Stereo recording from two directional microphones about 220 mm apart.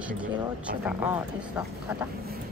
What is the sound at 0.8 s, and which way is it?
Speech, 5° right (ahead or behind).